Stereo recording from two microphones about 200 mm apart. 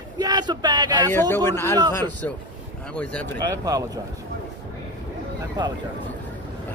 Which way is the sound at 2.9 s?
10° left (ahead or behind).